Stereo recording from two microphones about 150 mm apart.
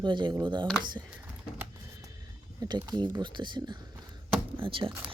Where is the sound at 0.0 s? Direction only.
30° right (ahead or behind).